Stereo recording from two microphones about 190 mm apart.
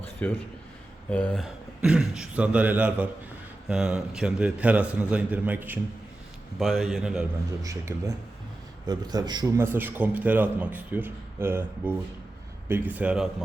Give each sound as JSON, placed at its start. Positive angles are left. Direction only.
{"t": 0.2, "sound": "a man's voice", "side_deg": 10}
{"t": 7.6, "sound": "a man's voice", "side_deg": -15}